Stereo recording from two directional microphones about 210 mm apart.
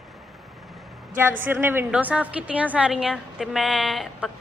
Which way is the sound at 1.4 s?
10° right (ahead or behind).